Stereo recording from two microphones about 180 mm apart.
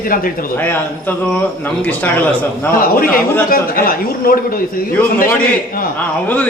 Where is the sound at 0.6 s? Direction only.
10° left (ahead or behind).